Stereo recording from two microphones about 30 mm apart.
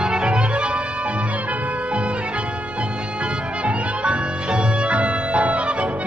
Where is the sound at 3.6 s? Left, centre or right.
Right.